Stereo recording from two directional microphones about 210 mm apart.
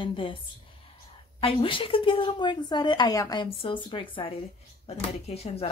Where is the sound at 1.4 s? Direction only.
25° left (ahead or behind).